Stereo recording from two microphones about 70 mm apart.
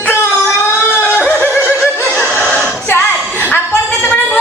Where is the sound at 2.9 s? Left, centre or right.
Left.